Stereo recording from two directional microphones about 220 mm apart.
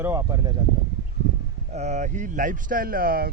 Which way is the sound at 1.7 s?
30° right (ahead or behind).